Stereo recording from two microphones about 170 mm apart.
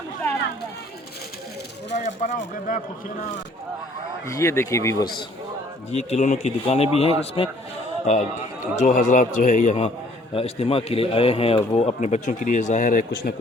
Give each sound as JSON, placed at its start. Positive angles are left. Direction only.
{"t": 1.9, "sound": "a man's voice", "side_deg": 50}
{"t": 4.3, "sound": "speech", "side_deg": 15}
{"t": 5.9, "sound": "speech", "side_deg": 40}
{"t": 8.6, "sound": "a man's voice", "side_deg": 45}